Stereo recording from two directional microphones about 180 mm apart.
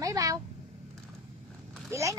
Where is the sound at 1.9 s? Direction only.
15° right (ahead or behind).